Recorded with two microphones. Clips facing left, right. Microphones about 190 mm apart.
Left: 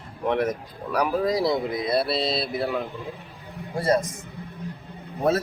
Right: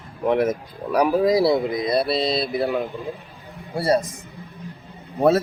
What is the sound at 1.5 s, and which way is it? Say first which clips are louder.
Speech: right 4 dB; centre (ahead or behind).